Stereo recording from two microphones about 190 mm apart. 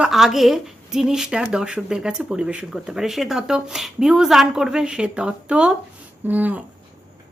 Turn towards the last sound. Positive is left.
turn(degrees=-10)  # may be behind; listen again after turning